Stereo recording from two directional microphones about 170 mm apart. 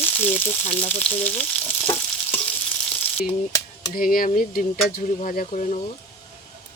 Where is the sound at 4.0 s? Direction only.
55° left (ahead or behind).